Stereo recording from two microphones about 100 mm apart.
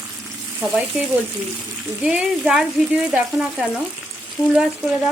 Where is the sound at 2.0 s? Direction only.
10° right (ahead or behind).